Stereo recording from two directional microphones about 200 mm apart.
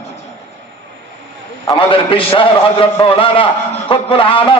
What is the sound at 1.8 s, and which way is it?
A man's voice, 25° left (ahead or behind).